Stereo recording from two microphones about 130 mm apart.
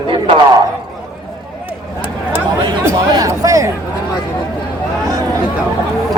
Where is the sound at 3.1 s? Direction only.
25° right (ahead or behind).